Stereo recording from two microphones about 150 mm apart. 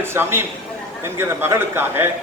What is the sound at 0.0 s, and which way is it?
A man's voice, 15° right (ahead or behind).